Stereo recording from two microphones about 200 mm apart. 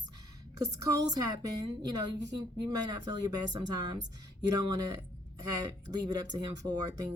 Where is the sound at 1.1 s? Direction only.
20° right (ahead or behind).